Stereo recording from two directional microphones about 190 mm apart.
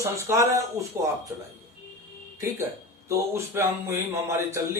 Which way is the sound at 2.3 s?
15° right (ahead or behind).